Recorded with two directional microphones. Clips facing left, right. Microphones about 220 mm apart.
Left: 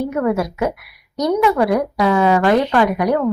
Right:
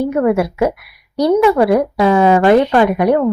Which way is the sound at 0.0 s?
30° right (ahead or behind).